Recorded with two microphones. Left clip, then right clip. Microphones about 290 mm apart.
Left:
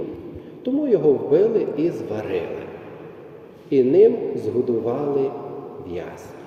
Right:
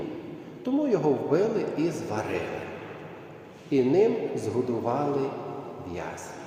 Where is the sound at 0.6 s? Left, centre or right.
Centre.